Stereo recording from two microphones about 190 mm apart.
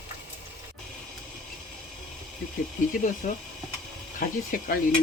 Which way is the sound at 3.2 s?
45° left (ahead or behind).